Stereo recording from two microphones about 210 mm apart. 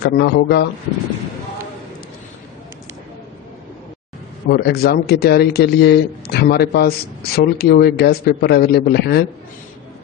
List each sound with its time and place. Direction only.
0.0 s a man's voice: 55° left (ahead or behind)
4.4 s a man's voice: 50° left (ahead or behind)